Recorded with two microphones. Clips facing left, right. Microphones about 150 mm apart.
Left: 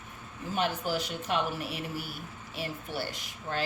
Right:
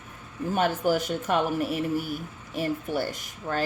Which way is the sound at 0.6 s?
45° right (ahead or behind).